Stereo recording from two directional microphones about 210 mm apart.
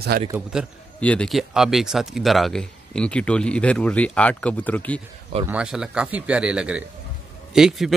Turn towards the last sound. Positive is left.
turn(degrees=0)  # may be behind; listen again after turning